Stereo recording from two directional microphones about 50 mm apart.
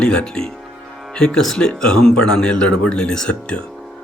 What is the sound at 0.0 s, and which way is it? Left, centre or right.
Speech, centre.